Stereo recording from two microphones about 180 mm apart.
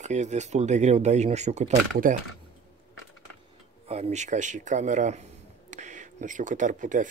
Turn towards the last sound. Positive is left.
turn(degrees=-45)  # may be behind; listen again after turning